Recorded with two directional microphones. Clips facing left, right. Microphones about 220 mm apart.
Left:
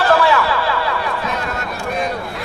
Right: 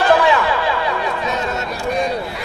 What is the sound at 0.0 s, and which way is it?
Chatter, 15° right (ahead or behind).